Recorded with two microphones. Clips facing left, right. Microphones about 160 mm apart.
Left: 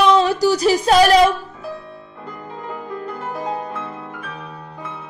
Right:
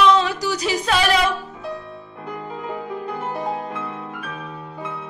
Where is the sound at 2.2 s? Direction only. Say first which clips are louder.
Right 3 dB; 5° right (ahead or behind).